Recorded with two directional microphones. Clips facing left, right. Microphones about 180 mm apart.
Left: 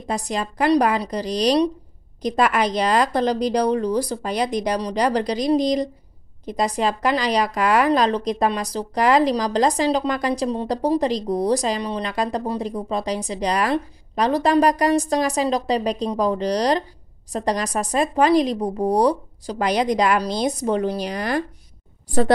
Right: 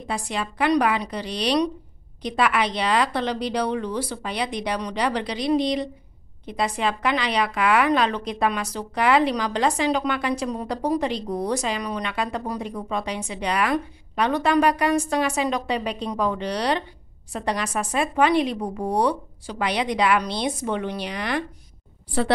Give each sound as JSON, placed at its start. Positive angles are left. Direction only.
{"t": 0.0, "sound": "speech", "side_deg": 40}